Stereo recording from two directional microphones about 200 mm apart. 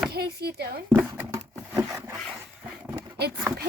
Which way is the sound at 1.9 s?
10° right (ahead or behind).